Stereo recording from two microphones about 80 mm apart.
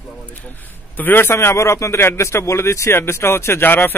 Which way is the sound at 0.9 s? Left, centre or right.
Left.